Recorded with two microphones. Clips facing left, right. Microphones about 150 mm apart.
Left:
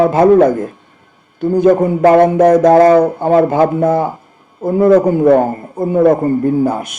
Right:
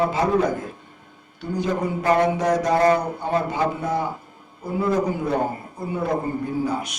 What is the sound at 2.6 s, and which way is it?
Speech, 90° left.